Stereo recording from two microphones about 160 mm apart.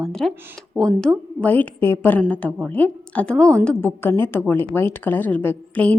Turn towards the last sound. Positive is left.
turn(degrees=10)  # may be behind; listen again after turning